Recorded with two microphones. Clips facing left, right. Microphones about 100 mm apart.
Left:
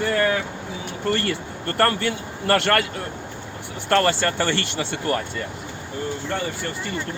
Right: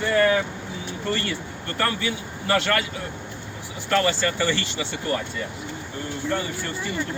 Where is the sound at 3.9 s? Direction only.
55° left (ahead or behind).